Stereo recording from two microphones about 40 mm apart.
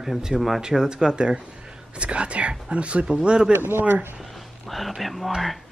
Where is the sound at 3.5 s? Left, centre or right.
Right.